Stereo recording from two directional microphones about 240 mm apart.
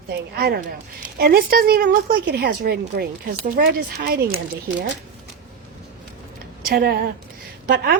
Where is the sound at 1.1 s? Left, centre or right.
Right.